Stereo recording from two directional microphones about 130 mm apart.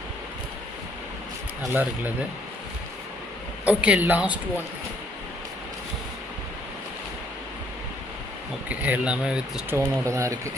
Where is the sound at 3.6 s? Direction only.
10° right (ahead or behind).